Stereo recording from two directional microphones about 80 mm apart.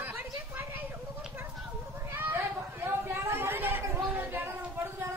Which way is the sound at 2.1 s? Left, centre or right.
Right.